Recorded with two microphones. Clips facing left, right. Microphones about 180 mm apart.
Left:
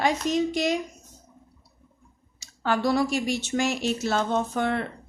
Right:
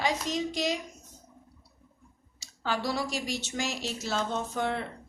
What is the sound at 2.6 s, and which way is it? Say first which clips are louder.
A woman's voice: left 7 dB; 55° left (ahead or behind).